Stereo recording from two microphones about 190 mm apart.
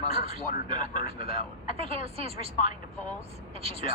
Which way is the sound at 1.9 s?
30° right (ahead or behind).